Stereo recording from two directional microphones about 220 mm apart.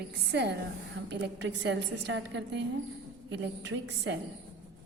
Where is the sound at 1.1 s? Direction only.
50° right (ahead or behind).